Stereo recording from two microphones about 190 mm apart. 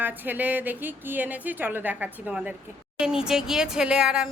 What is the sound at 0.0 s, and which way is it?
A woman's voice, 10° right (ahead or behind).